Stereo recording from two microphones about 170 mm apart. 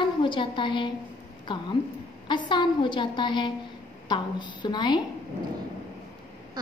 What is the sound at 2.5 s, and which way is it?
A woman's voice, 25° left (ahead or behind).